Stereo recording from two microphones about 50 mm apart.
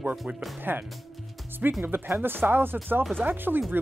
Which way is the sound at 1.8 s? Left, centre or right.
Right.